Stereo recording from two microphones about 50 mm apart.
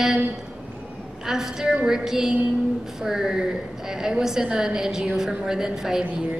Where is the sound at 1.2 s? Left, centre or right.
Centre.